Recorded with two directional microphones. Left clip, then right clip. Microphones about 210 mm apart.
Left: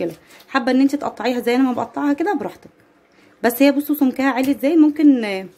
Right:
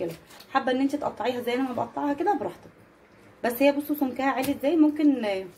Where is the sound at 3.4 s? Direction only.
50° left (ahead or behind).